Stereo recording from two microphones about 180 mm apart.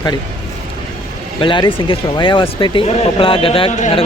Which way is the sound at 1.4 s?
25° left (ahead or behind).